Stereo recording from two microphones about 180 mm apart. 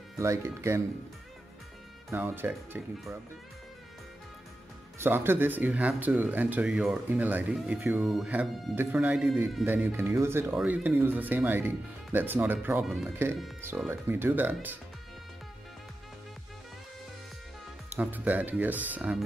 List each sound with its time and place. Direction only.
0.2 s speech: 15° right (ahead or behind)
2.0 s speech: 10° right (ahead or behind)
4.9 s speech: 10° right (ahead or behind)
9.7 s speech: 15° right (ahead or behind)
17.9 s speech: 10° right (ahead or behind)